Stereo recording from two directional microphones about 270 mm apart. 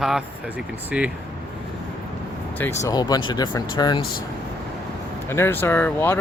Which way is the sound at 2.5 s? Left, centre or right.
Centre.